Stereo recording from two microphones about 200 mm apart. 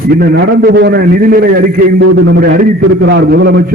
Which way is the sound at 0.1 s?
50° right (ahead or behind).